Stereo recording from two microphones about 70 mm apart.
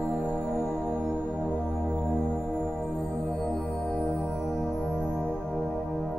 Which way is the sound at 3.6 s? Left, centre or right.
Centre.